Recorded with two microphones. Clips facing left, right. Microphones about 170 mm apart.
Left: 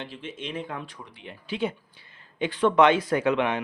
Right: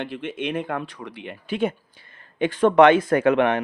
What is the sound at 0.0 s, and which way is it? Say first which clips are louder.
Speech: right 8 dB; 60° right (ahead or behind).